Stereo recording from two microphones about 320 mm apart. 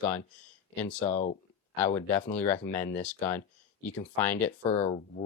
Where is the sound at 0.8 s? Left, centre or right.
Left.